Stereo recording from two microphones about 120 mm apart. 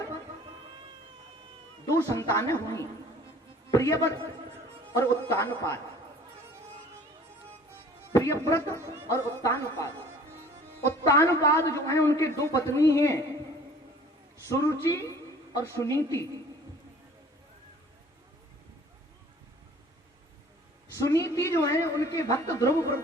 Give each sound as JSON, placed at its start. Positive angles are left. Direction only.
{"t": 2.1, "sound": "a man's voice", "side_deg": 25}
{"t": 8.1, "sound": "a man's voice", "side_deg": 20}
{"t": 10.8, "sound": "a man's voice", "side_deg": 20}
{"t": 14.4, "sound": "a man's voice", "side_deg": 25}
{"t": 20.9, "sound": "a man's voice", "side_deg": 25}